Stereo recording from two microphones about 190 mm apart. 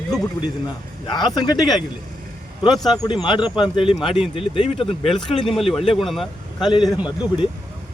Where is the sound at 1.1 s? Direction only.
20° left (ahead or behind).